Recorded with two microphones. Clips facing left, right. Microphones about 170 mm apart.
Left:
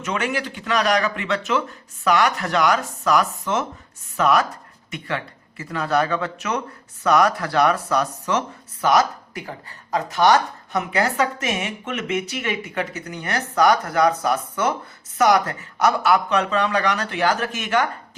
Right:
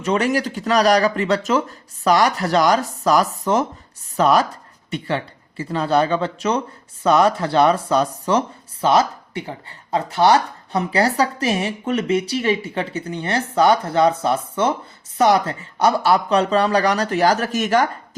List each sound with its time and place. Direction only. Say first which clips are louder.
0.0 s speech: right 6 dB; 35° right (ahead or behind)